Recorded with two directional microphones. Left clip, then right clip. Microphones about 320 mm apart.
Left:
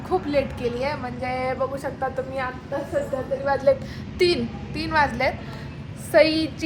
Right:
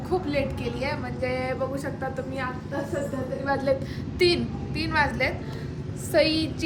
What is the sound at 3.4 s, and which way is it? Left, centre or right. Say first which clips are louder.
A woman's voice: left 5 dB; centre.